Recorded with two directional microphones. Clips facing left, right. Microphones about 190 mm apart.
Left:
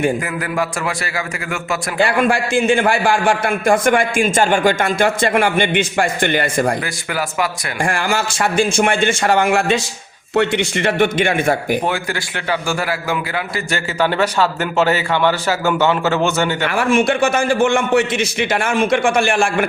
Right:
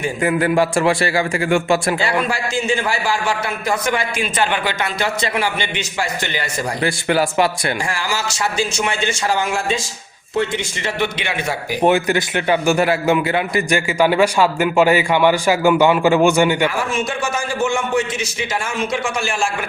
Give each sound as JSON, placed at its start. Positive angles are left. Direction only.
{"t": 0.3, "sound": "a man's voice", "side_deg": -30}
{"t": 2.0, "sound": "a man's voice", "side_deg": 55}
{"t": 6.8, "sound": "a man's voice", "side_deg": -30}
{"t": 7.9, "sound": "a man's voice", "side_deg": 55}
{"t": 11.9, "sound": "a man's voice", "side_deg": -20}
{"t": 16.9, "sound": "a man's voice", "side_deg": 65}